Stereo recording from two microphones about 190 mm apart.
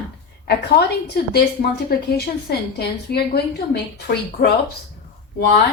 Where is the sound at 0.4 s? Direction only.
60° left (ahead or behind).